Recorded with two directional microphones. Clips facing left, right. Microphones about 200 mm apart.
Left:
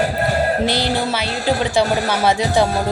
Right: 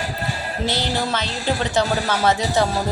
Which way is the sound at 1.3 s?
60° left (ahead or behind).